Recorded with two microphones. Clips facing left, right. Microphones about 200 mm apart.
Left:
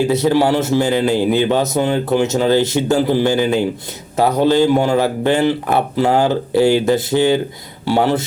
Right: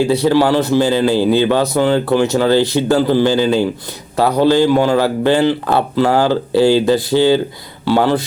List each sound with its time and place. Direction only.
0.1 s speech: 20° left (ahead or behind)